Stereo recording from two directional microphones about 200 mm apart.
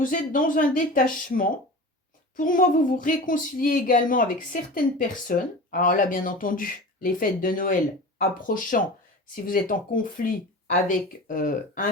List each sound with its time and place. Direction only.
0.0 s speech: 45° left (ahead or behind)